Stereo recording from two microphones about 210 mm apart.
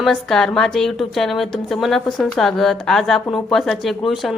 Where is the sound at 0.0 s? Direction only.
Centre (ahead or behind).